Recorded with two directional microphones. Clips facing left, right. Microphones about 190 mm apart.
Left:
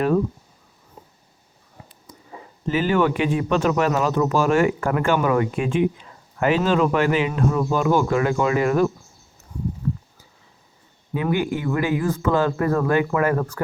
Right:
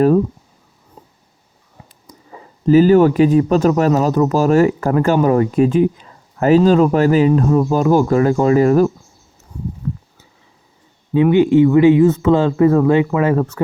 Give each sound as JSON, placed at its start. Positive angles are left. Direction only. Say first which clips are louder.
{"t": 2.6, "sound": "speech", "louder": "right 10 dB", "side_deg": -40}
{"t": 11.1, "sound": "speech", "louder": "right 11 dB", "side_deg": -25}